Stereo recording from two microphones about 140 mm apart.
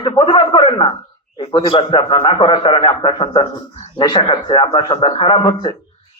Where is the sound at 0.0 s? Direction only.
35° left (ahead or behind).